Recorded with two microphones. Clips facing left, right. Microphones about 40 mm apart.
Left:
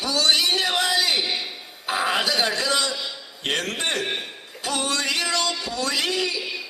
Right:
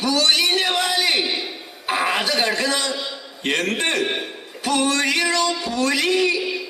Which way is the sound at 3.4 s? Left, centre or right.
Right.